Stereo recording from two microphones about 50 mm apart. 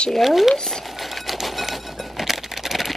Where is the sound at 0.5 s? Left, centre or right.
Centre.